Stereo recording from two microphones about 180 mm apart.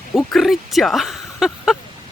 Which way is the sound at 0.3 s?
Centre (ahead or behind).